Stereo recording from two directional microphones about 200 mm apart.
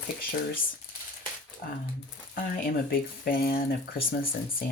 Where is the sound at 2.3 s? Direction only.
45° left (ahead or behind).